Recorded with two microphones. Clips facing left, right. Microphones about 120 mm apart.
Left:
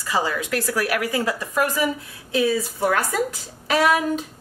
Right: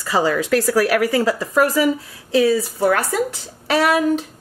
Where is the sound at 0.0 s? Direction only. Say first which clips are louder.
Right 5 dB; 40° right (ahead or behind).